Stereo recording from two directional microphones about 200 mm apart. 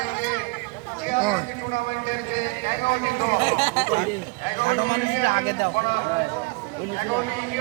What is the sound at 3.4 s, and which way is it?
Speech, 35° right (ahead or behind).